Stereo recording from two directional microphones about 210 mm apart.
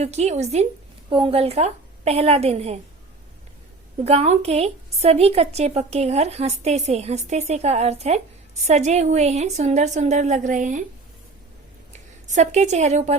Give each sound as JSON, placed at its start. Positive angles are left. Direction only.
{"t": 0.0, "sound": "a woman's voice", "side_deg": -30}
{"t": 4.0, "sound": "a woman's voice", "side_deg": -30}
{"t": 12.3, "sound": "a woman's voice", "side_deg": -35}